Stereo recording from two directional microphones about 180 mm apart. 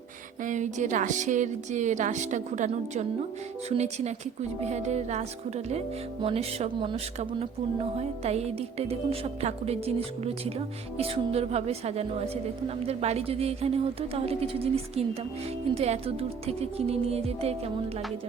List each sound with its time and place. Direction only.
0.4 s a woman's voice: 45° right (ahead or behind)
10.9 s a woman's voice: 35° right (ahead or behind)